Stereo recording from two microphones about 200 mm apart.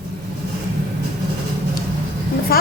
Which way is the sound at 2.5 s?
50° left (ahead or behind).